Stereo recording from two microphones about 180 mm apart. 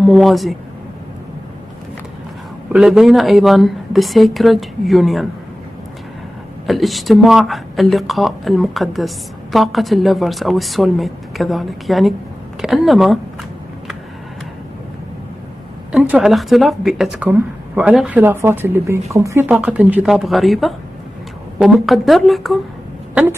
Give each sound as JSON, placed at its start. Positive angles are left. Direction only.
{"t": 0.0, "sound": "speech", "side_deg": 0}
{"t": 2.7, "sound": "speech", "side_deg": -5}
{"t": 6.6, "sound": "speech", "side_deg": 0}
{"t": 15.9, "sound": "speech", "side_deg": -5}